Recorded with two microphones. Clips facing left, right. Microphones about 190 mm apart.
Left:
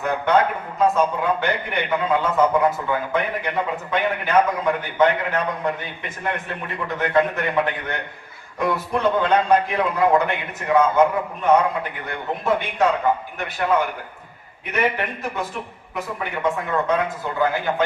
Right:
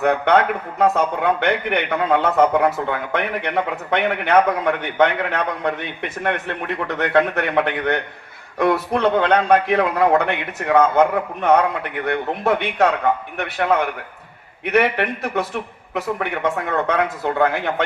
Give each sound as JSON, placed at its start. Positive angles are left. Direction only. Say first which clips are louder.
{"t": 0.0, "sound": "a man's voice", "louder": "right 3 dB", "side_deg": -70}